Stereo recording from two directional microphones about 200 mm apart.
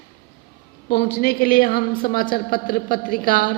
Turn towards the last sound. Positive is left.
turn(degrees=45)  # may be behind; listen again after turning